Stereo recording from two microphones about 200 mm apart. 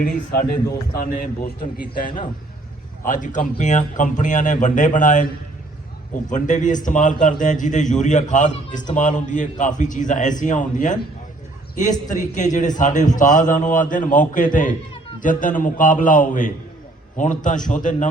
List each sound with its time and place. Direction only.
0.3 s a man's voice: 50° left (ahead or behind)